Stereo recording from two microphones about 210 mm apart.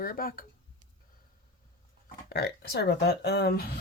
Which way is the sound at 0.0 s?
45° left (ahead or behind).